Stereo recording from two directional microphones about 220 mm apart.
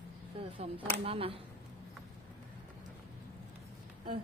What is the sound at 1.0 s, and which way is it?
Speech, 25° right (ahead or behind).